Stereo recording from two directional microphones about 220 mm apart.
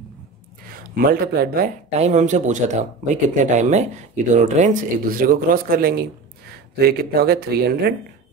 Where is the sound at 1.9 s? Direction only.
30° right (ahead or behind).